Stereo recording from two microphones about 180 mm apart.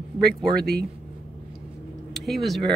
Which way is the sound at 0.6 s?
65° right (ahead or behind).